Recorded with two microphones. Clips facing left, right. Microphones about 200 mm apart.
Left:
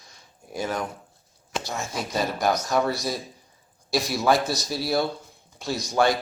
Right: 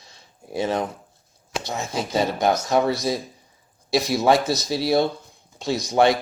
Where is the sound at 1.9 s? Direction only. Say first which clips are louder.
Right 5 dB; 25° right (ahead or behind).